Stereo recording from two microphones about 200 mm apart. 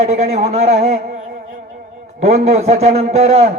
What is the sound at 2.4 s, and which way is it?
A man's voice, 35° right (ahead or behind).